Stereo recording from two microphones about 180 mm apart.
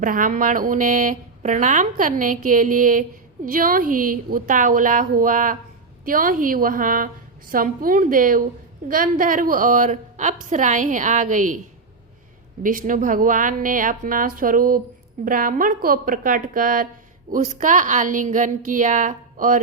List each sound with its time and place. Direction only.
0.0 s speech: 50° right (ahead or behind)
12.6 s speech: 50° right (ahead or behind)